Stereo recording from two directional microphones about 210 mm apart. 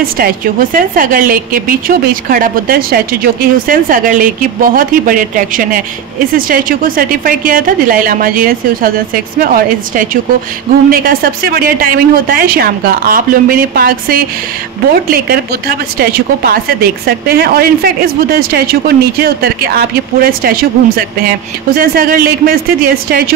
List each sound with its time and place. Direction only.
0.0 s a woman's voice: 40° right (ahead or behind)